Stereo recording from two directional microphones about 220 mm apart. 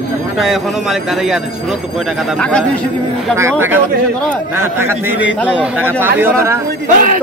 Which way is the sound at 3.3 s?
10° right (ahead or behind).